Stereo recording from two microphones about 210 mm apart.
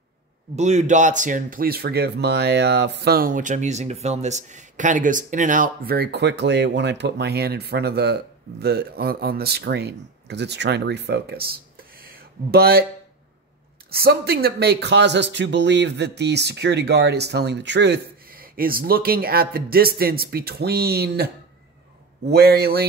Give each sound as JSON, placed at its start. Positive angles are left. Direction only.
{"t": 0.6, "sound": "speech", "side_deg": -35}
{"t": 13.8, "sound": "speech", "side_deg": -45}
{"t": 22.3, "sound": "speech", "side_deg": -50}